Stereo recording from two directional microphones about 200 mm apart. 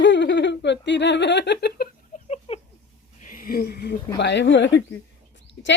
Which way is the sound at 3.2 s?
45° left (ahead or behind).